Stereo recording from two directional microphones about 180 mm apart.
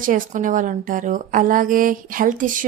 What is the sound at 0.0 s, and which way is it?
A woman's voice, 50° right (ahead or behind).